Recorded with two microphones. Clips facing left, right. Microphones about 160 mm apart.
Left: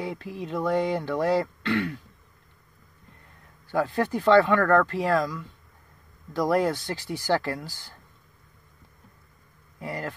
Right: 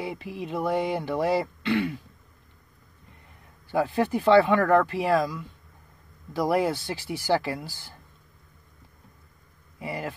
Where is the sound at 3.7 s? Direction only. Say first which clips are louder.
Right 1 dB; 15° right (ahead or behind).